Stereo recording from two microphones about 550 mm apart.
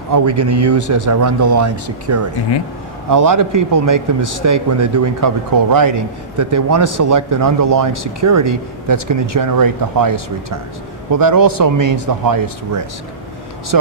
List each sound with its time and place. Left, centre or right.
0.1 s a man's voice: right